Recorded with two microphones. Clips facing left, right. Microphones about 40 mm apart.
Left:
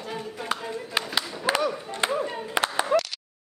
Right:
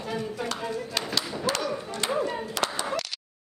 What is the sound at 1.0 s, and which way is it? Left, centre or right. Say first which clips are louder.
Speech: left 5 dB; centre.